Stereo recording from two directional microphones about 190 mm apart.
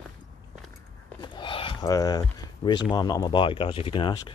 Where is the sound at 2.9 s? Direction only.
20° left (ahead or behind).